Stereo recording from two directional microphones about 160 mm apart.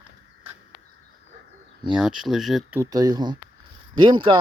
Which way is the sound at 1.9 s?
Centre (ahead or behind).